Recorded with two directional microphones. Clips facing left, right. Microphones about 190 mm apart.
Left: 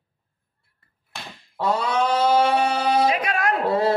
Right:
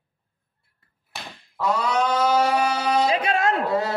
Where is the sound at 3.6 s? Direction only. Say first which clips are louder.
Left 3 dB; 30° left (ahead or behind).